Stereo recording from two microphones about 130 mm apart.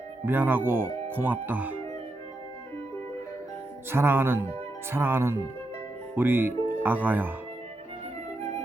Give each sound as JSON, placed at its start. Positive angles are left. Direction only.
{"t": 0.3, "sound": "speech", "side_deg": -15}
{"t": 3.8, "sound": "speech", "side_deg": -20}